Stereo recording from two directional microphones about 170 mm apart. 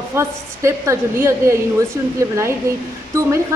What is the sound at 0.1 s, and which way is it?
A woman's voice, 15° right (ahead or behind).